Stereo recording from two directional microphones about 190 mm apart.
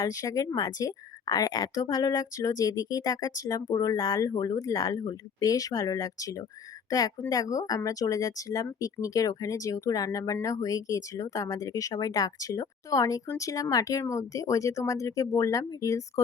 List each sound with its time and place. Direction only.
0.0 s a woman's voice: 20° left (ahead or behind)